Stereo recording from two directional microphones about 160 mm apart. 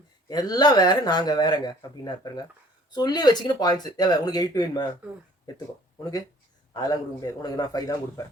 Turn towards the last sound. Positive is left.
turn(degrees=25)  # may be behind; listen again after turning